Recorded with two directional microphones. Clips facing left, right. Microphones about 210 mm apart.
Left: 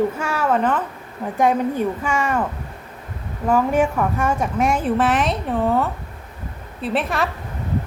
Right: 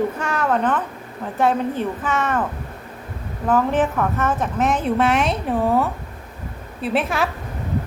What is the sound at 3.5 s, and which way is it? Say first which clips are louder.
A woman's voice: left 1 dB; 10° left (ahead or behind).